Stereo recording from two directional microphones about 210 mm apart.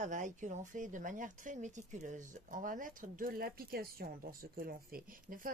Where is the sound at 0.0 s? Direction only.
35° right (ahead or behind).